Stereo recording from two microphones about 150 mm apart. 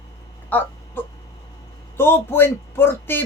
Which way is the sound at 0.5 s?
10° left (ahead or behind).